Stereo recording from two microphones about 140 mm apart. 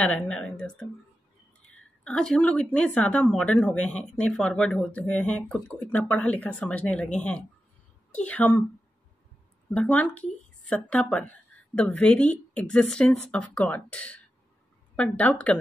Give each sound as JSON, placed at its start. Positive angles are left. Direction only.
{"t": 0.0, "sound": "a woman's voice", "side_deg": 10}
{"t": 9.7, "sound": "speech", "side_deg": 10}